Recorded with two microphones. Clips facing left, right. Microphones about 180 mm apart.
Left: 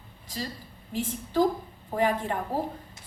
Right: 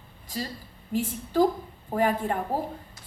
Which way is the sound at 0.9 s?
45° right (ahead or behind).